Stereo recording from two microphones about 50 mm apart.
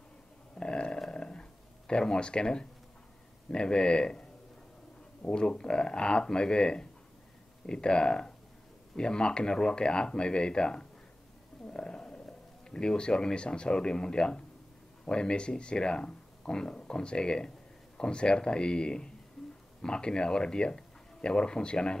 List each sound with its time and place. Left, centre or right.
0.6 s a sound: centre
3.5 s speech: centre
5.3 s speech: centre